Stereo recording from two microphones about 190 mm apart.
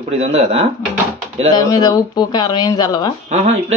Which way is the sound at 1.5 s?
20° left (ahead or behind).